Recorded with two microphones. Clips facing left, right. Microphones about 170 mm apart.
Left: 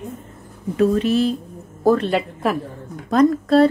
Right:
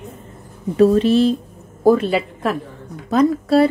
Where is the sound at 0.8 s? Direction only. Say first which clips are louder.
Right 4 dB; 30° right (ahead or behind).